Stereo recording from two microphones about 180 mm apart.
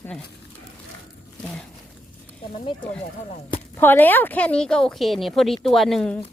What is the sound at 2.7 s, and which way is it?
Speech, 30° left (ahead or behind).